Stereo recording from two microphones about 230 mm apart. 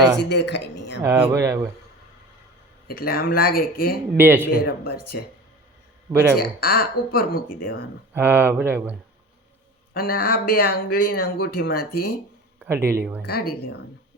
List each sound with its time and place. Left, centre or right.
0.3 s speech: left
1.0 s speech: centre
2.8 s speech: left
4.2 s speech: centre
4.5 s speech: left
6.3 s speech: left
8.1 s speech: centre
9.9 s speech: left
12.6 s speech: centre
13.2 s speech: left